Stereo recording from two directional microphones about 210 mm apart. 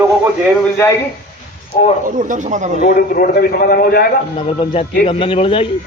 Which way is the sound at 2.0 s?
40° right (ahead or behind).